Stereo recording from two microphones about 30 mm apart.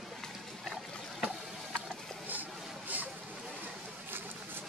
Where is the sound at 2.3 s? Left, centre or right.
Right.